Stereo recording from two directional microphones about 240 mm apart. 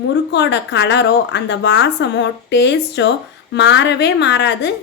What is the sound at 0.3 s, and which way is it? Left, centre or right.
A woman's voice, left.